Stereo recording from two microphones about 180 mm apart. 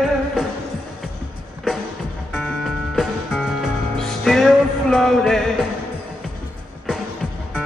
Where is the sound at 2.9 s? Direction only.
Centre (ahead or behind).